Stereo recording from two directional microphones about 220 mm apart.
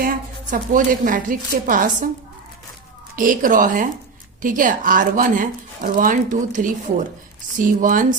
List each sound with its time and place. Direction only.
0.0 s a woman's voice: 40° right (ahead or behind)
3.2 s speech: 40° right (ahead or behind)